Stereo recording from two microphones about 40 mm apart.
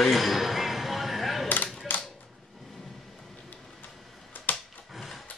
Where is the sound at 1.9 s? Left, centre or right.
Left.